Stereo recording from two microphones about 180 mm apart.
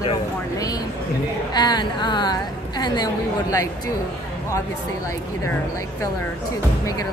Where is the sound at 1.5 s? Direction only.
20° left (ahead or behind).